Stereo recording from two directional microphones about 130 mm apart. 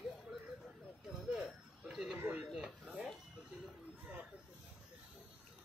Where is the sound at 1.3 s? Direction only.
5° right (ahead or behind).